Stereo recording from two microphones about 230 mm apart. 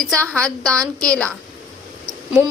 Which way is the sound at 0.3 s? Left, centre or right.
Centre.